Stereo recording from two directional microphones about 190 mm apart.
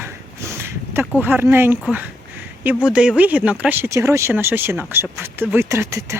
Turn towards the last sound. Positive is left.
turn(degrees=-15)  # may be behind; listen again after turning